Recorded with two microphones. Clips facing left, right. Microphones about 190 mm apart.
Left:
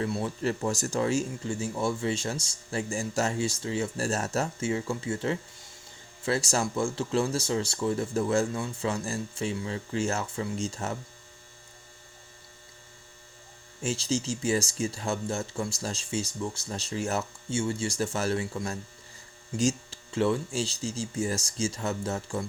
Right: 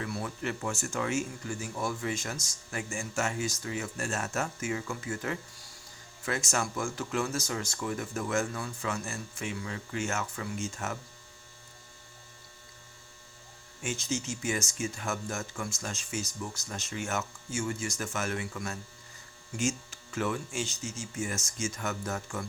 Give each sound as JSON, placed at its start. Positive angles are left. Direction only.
{"t": 0.0, "sound": "speech", "side_deg": 25}
{"t": 13.8, "sound": "speech", "side_deg": 30}